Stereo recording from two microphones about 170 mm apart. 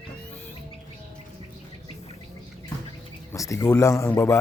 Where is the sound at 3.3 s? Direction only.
20° left (ahead or behind).